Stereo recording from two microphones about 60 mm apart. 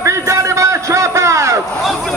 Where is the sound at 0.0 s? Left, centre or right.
Right.